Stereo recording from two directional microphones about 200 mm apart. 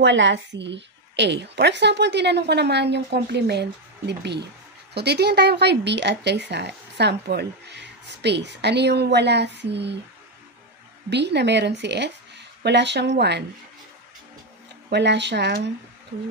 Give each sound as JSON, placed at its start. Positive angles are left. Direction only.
{"t": 0.0, "sound": "speech", "side_deg": -60}
{"t": 11.1, "sound": "speech", "side_deg": -60}
{"t": 14.9, "sound": "speech", "side_deg": -60}